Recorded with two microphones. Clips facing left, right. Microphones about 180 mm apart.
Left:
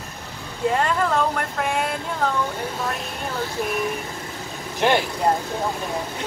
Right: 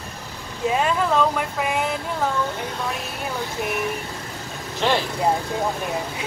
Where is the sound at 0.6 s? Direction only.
10° right (ahead or behind).